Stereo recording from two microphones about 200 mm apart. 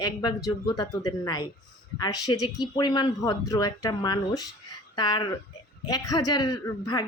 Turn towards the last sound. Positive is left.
turn(degrees=20)  # may be behind; listen again after turning